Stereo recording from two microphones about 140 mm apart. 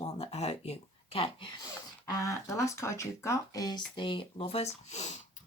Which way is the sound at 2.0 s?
25° left (ahead or behind).